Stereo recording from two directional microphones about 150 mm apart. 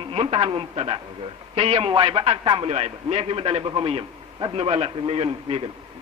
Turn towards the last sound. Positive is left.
turn(degrees=-40)  # may be behind; listen again after turning